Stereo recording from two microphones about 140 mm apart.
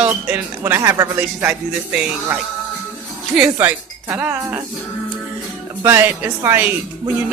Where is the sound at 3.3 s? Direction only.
10° right (ahead or behind).